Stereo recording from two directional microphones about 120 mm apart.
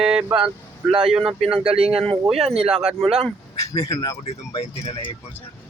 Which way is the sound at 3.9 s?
30° left (ahead or behind).